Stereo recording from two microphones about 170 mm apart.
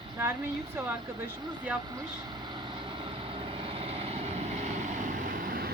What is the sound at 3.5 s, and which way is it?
Vehicle, 30° right (ahead or behind).